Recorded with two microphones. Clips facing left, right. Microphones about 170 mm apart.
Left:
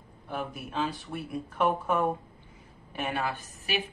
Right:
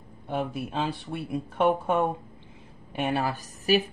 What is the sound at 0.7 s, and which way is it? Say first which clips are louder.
A woman's voice: right 2 dB; 25° right (ahead or behind).